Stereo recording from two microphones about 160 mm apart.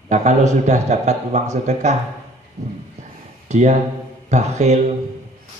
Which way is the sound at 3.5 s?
45° right (ahead or behind).